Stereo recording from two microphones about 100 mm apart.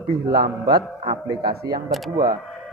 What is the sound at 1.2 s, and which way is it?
Speech, 40° right (ahead or behind).